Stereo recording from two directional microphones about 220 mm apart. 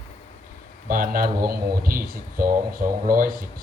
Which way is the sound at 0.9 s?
40° right (ahead or behind).